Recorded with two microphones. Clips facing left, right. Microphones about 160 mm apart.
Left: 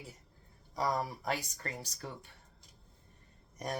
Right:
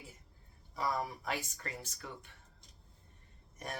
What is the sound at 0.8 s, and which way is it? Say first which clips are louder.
Speech: left 3 dB; 35° left (ahead or behind).